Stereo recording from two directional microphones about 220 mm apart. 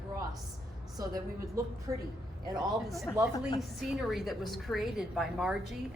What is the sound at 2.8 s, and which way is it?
A woman's voice, centre (ahead or behind).